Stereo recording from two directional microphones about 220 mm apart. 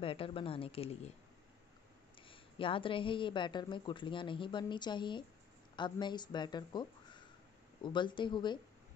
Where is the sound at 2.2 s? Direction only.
25° left (ahead or behind).